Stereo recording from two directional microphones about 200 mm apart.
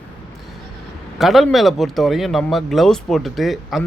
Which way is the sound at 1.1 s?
Centre (ahead or behind).